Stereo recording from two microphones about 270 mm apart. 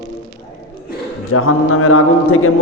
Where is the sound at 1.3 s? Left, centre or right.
Left.